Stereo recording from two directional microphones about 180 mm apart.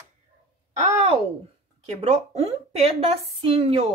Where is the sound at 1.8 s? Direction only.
35° right (ahead or behind).